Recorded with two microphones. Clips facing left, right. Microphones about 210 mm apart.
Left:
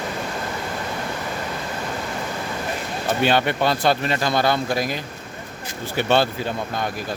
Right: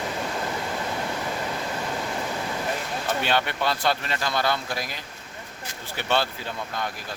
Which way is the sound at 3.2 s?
15° left (ahead or behind).